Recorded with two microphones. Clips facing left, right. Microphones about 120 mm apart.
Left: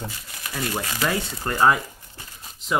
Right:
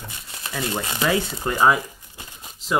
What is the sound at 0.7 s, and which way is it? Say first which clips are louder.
Speech: right 1 dB; 25° right (ahead or behind).